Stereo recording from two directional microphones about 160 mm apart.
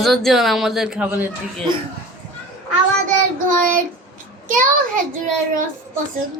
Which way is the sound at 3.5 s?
60° right (ahead or behind).